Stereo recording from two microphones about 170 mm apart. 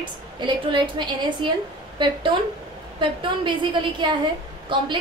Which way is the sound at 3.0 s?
30° right (ahead or behind).